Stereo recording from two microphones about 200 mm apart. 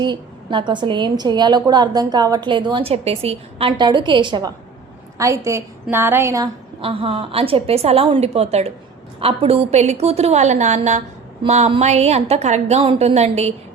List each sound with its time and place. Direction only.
0.0 s a woman's voice: 20° right (ahead or behind)
6.8 s a woman's voice: 30° right (ahead or behind)